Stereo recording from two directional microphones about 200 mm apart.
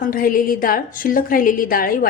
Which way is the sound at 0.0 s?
45° left (ahead or behind).